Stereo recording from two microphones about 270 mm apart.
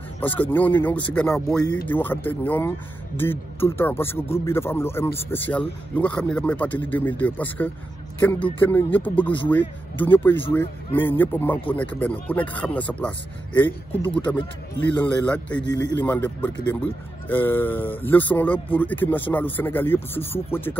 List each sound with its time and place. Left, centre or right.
0.2 s speech: centre
13.6 s speech: centre
15.0 s speech: centre